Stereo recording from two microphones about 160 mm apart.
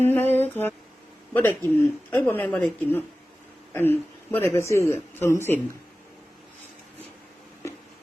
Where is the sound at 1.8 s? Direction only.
10° left (ahead or behind).